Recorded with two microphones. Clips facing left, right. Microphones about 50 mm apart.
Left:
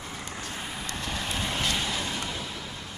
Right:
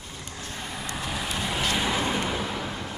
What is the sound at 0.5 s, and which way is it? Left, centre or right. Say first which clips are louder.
Vehicle: right 1 dB; centre.